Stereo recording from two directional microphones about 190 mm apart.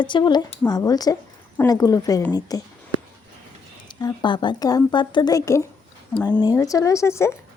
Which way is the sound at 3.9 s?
20° left (ahead or behind).